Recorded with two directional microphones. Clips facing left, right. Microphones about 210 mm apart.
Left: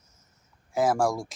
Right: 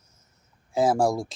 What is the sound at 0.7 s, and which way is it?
Speech, 30° right (ahead or behind).